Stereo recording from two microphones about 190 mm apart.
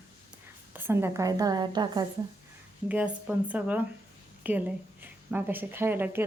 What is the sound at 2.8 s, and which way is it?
Speech, 5° right (ahead or behind).